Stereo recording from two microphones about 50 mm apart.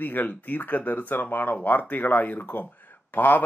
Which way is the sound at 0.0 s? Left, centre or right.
Left.